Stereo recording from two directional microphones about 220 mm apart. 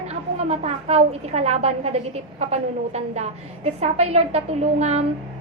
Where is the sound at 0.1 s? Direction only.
30° right (ahead or behind).